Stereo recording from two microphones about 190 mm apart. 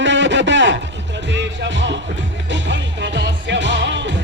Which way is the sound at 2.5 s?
70° right (ahead or behind).